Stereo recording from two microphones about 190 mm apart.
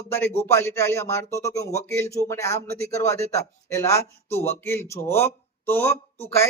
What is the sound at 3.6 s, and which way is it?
Speech, 15° left (ahead or behind).